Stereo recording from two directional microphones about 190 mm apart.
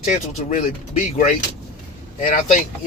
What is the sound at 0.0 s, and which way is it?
Speech, 40° left (ahead or behind).